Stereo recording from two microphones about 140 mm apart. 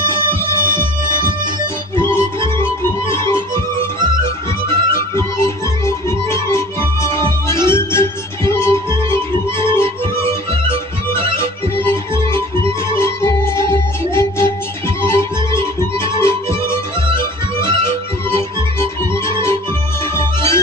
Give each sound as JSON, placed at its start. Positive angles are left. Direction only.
{"t": 0.0, "sound": "music", "side_deg": 20}